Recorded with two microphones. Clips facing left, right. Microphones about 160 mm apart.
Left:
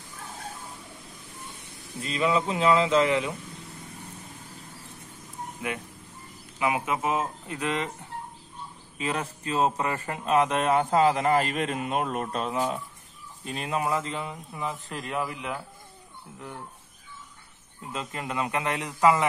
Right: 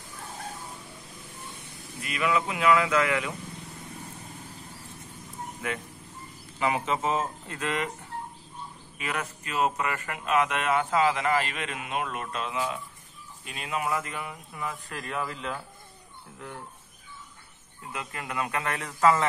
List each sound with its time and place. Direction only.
2.0 s speech: 30° left (ahead or behind)
5.6 s speech: 15° left (ahead or behind)
8.9 s a man's voice: 30° left (ahead or behind)
17.9 s speech: 25° left (ahead or behind)